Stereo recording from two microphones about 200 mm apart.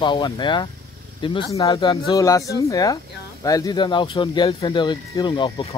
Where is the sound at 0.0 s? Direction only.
25° left (ahead or behind).